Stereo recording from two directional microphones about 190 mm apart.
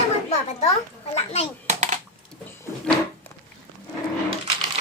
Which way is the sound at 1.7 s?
40° right (ahead or behind).